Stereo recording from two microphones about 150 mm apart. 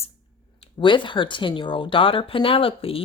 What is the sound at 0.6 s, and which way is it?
A woman's voice, 35° left (ahead or behind).